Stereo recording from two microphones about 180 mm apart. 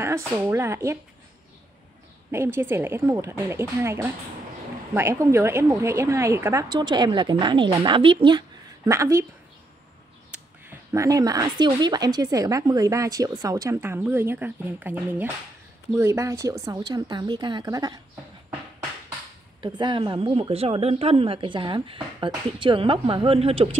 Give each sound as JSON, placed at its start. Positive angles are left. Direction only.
{"t": 0.0, "sound": "a woman's voice", "side_deg": -15}
{"t": 2.3, "sound": "a woman's voice", "side_deg": -15}
{"t": 10.3, "sound": "speech", "side_deg": -15}
{"t": 19.6, "sound": "speech", "side_deg": -25}